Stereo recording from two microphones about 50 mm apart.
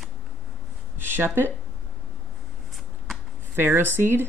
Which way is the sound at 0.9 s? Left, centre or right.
Right.